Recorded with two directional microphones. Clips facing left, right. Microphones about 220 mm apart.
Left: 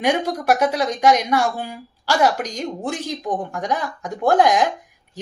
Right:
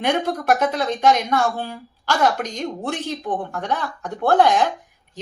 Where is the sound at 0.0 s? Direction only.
10° left (ahead or behind).